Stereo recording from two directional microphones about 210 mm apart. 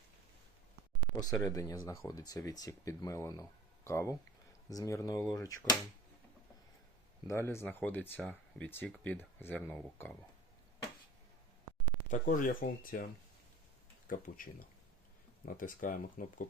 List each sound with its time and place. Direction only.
1.2 s speech: 15° left (ahead or behind)
7.3 s speech: 10° left (ahead or behind)
12.2 s speech: 40° left (ahead or behind)
14.1 s speech: 40° left (ahead or behind)
15.5 s speech: 40° left (ahead or behind)